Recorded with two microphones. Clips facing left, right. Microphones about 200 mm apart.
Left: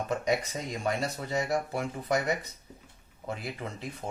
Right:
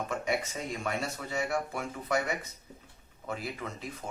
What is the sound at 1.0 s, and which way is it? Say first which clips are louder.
Speech: left 3 dB; 35° left (ahead or behind).